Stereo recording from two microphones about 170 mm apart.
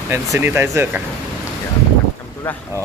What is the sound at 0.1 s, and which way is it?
Speech, 15° right (ahead or behind).